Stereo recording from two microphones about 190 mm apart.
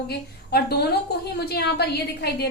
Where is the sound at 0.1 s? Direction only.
60° left (ahead or behind).